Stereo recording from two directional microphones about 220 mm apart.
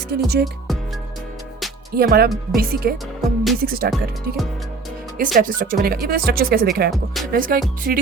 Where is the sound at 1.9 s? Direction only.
45° right (ahead or behind).